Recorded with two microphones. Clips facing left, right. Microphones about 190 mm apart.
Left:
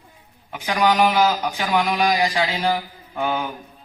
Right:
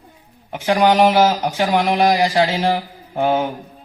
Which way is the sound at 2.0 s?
50° right (ahead or behind).